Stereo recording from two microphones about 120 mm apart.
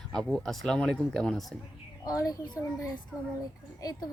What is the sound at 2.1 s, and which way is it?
A child's voice, 30° left (ahead or behind).